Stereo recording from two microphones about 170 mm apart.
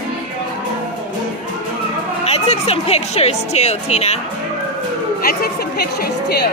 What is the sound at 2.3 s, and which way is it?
Speech, 35° left (ahead or behind).